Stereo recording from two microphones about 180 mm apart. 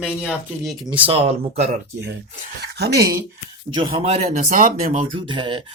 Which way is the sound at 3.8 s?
35° right (ahead or behind).